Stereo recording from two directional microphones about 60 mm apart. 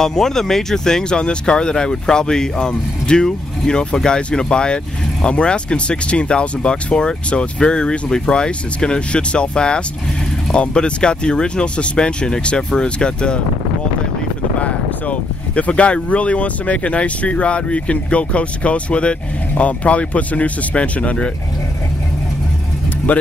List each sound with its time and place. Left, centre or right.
0.0 s speech: centre
14.6 s speech: left
23.1 s speech: left